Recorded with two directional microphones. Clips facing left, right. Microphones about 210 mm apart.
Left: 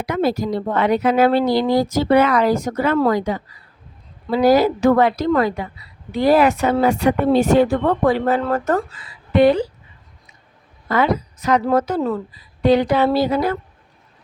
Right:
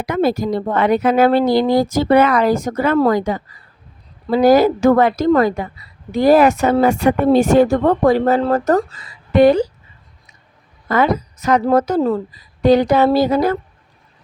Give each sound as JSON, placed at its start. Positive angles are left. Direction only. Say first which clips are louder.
{"t": 0.0, "sound": "a woman's voice", "louder": "right 2 dB", "side_deg": -50}
{"t": 10.8, "sound": "a woman's voice", "louder": "right 2 dB", "side_deg": -45}